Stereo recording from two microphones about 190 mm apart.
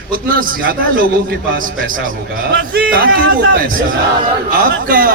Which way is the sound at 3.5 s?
45° right (ahead or behind).